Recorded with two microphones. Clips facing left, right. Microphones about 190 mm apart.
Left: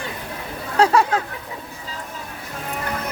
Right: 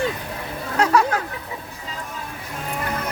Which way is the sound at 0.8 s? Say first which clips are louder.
Left 2 dB; 25° left (ahead or behind).